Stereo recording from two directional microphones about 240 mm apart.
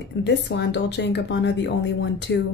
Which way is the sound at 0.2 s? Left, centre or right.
Left.